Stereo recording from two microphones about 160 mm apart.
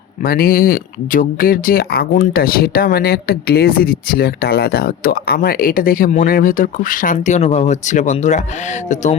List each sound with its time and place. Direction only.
0.3 s speech: 65° left (ahead or behind); by 8.4 s 45° left (ahead or behind)